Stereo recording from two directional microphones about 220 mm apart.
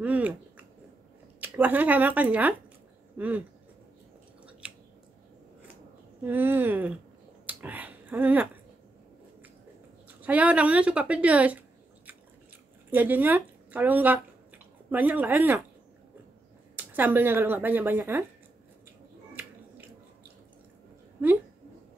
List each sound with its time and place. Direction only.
0.0 s a sound: 5° right (ahead or behind)
1.4 s speech: 10° right (ahead or behind)
4.5 s chewing: 5° right (ahead or behind)
6.2 s speech: 10° right (ahead or behind)
7.4 s a sound: 5° right (ahead or behind)
10.0 s speech: 5° right (ahead or behind)
12.9 s speech: 10° right (ahead or behind)
16.7 s speech: 10° right (ahead or behind)
21.2 s speech: 10° right (ahead or behind)